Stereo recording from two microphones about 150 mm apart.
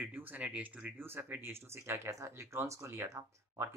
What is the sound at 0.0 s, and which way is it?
Speech, 10° right (ahead or behind).